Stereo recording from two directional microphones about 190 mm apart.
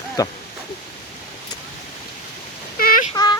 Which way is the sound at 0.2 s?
20° left (ahead or behind).